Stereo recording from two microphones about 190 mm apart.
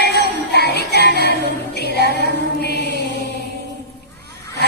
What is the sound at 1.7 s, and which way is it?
Music, 60° left (ahead or behind).